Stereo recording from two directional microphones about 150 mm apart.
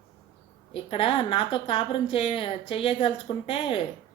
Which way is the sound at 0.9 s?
40° left (ahead or behind).